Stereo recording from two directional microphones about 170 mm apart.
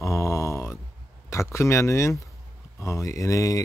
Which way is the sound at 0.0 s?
15° left (ahead or behind).